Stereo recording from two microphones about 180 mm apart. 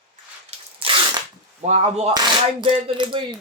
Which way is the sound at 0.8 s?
30° right (ahead or behind).